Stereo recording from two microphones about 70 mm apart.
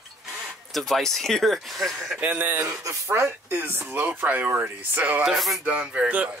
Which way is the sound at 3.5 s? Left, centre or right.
Right.